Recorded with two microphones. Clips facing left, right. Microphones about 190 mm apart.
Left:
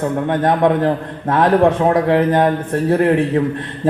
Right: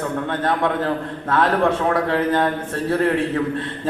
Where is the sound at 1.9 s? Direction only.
15° left (ahead or behind).